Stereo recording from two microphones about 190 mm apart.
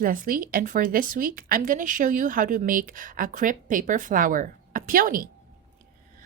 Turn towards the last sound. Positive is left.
turn(degrees=-50)  # may be behind; listen again after turning